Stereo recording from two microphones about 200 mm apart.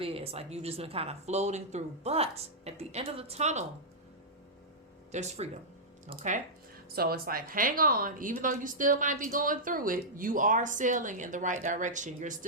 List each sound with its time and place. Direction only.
0.0 s speech: 30° right (ahead or behind)
5.1 s speech: 35° right (ahead or behind)
6.9 s speech: 50° right (ahead or behind)